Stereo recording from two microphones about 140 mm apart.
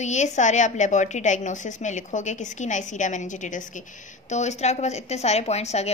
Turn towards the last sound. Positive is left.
turn(degrees=50)  # may be behind; listen again after turning